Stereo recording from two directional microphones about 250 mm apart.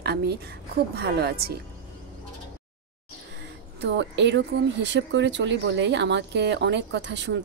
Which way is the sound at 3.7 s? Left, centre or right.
Right.